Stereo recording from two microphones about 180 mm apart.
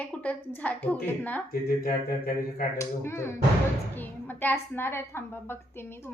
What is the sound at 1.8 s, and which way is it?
Speech, 55° left (ahead or behind).